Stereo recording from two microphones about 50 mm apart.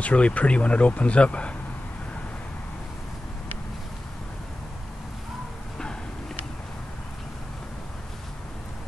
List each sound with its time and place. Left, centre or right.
0.0 s speech: left